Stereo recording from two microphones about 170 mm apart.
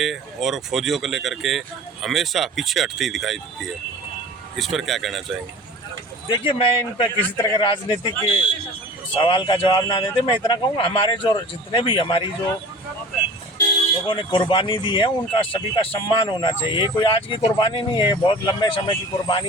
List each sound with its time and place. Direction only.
0.0 s speech: centre (ahead or behind)
6.3 s a man's voice: 30° left (ahead or behind)
14.1 s a man's voice: 30° left (ahead or behind)